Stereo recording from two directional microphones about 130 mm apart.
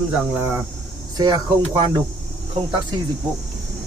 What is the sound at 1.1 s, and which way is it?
Speech, 30° right (ahead or behind).